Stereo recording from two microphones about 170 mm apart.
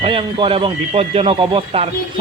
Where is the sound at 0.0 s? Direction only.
30° right (ahead or behind).